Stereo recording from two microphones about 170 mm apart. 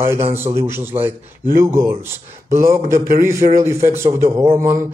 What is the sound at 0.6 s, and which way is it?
A man's voice, 15° right (ahead or behind).